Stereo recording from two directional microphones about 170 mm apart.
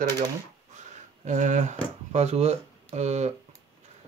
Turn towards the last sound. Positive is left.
turn(degrees=-40)  # may be behind; listen again after turning